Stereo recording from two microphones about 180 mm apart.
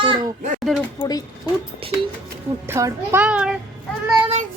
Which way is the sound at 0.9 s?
20° left (ahead or behind).